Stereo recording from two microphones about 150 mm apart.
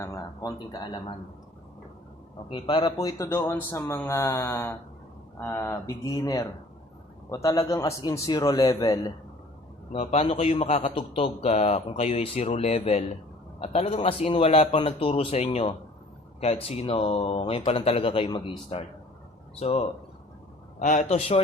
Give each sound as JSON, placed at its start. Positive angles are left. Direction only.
{"t": 0.0, "sound": "a man's voice", "side_deg": 20}
{"t": 2.5, "sound": "a man's voice", "side_deg": 35}
{"t": 9.9, "sound": "a man's voice", "side_deg": 45}
{"t": 20.7, "sound": "a man's voice", "side_deg": 55}